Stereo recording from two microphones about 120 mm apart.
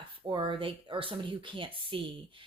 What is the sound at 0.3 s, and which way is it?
Speech, 40° right (ahead or behind).